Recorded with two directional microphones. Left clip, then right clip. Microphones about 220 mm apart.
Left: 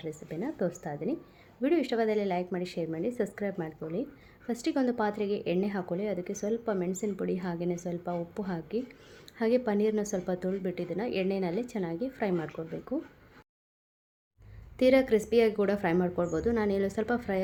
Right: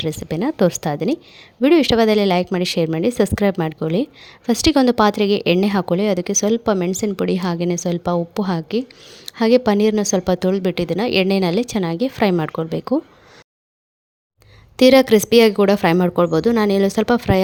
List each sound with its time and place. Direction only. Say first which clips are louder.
0.0 s speech: right 15 dB; 40° right (ahead or behind)
14.8 s speech: right 12 dB; 40° right (ahead or behind)